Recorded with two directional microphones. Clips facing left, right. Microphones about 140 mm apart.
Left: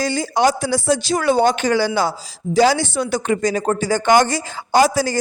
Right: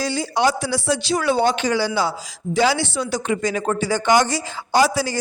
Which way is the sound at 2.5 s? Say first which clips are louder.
Left 4 dB; 40° left (ahead or behind).